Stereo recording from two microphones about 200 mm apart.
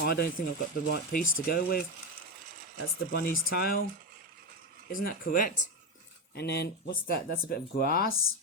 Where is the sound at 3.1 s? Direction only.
50° left (ahead or behind).